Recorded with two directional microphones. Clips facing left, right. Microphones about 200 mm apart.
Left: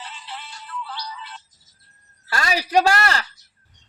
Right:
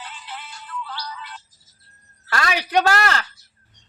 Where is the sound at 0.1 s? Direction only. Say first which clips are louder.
Even; centre (ahead or behind).